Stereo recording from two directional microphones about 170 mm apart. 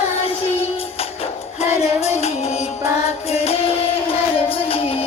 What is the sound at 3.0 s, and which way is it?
Music, 35° left (ahead or behind).